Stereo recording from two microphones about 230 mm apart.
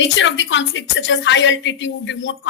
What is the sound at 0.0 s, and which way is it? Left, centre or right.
A woman's voice, left.